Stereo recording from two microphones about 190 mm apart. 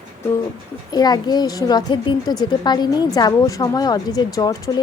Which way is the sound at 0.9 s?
20° left (ahead or behind).